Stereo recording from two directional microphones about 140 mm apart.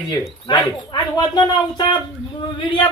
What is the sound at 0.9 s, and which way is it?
Speech, 30° left (ahead or behind).